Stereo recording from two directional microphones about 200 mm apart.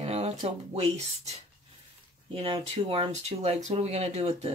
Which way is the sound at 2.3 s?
25° right (ahead or behind).